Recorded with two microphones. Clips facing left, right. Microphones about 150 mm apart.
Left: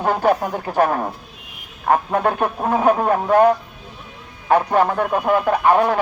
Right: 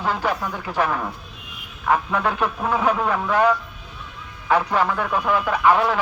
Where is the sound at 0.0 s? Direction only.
50° left (ahead or behind).